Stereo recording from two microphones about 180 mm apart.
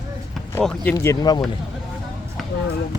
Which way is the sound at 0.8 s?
15° left (ahead or behind).